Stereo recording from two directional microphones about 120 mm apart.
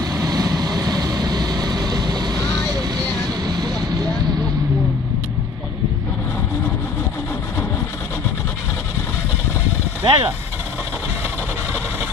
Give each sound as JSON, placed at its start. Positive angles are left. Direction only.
{"t": 0.1, "sound": "vehicle", "side_deg": -30}
{"t": 3.4, "sound": "vehicle", "side_deg": -35}
{"t": 10.0, "sound": "speech", "side_deg": -40}